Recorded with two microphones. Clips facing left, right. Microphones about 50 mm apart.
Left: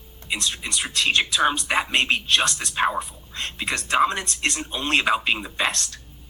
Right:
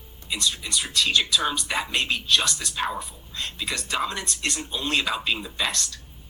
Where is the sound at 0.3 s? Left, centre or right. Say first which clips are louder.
Left 1 dB; left.